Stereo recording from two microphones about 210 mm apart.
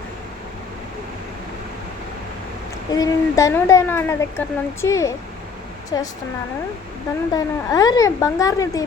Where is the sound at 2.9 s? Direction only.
15° left (ahead or behind).